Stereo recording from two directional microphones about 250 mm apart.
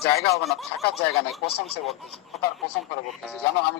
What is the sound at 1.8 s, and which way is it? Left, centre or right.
Speech, centre.